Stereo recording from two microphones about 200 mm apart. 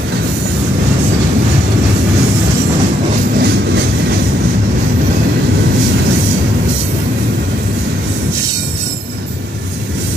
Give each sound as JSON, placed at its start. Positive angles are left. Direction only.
{"t": 3.3, "sound": "train", "side_deg": -55}